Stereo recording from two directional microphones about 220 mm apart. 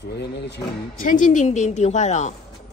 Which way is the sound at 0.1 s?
50° left (ahead or behind).